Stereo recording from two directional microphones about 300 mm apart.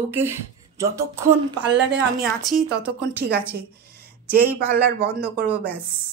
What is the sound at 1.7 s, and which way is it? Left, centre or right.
A woman's voice, right.